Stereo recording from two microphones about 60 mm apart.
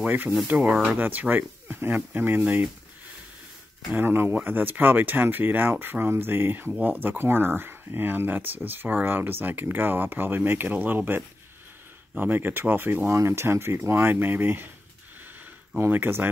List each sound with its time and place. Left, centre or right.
0.0 s speech: right
3.9 s speech: right
13.1 s speech: right
15.9 s speech: right